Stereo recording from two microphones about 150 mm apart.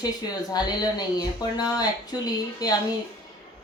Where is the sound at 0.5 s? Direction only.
25° left (ahead or behind).